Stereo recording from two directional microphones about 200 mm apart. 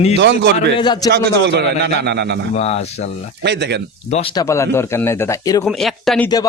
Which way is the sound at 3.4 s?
60° right (ahead or behind).